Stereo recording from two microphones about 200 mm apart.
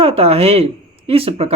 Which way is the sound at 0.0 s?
30° right (ahead or behind).